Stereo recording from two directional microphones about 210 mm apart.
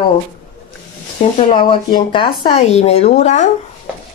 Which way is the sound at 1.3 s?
25° left (ahead or behind).